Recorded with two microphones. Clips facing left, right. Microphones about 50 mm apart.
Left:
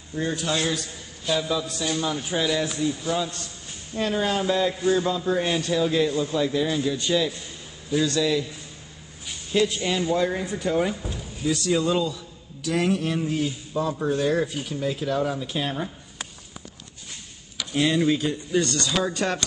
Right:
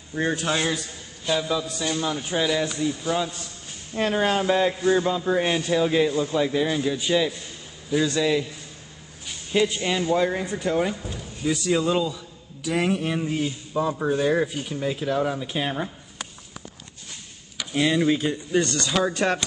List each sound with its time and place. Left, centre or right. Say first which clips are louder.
0.1 s a man's voice: right 2 dB; right
1.2 s a man's voice: right 1 dB; centre
3.9 s a man's voice: right 2 dB; right; by 7.3 s centre
8.0 s a man's voice: right 1 dB; right
9.8 s a man's voice: right 1 dB; centre
10.4 s a man's voice: even; centre
17.6 s a man's voice: even; centre